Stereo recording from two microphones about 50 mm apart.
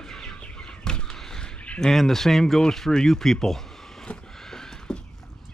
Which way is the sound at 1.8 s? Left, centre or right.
Centre.